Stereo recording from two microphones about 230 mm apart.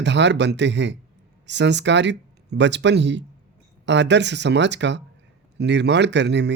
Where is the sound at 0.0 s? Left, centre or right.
Right.